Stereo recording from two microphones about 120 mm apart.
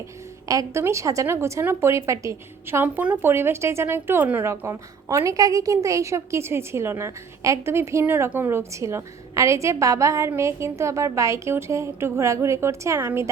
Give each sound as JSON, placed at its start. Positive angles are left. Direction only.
{"t": 0.4, "sound": "a woman's voice", "side_deg": -25}